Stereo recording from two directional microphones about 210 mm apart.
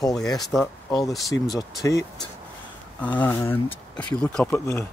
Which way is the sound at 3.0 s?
10° left (ahead or behind).